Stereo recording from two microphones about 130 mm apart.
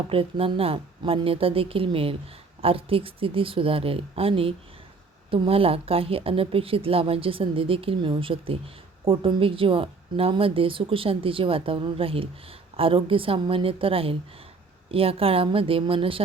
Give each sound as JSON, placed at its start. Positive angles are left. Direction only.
{"t": 0.1, "sound": "a woman's voice", "side_deg": -45}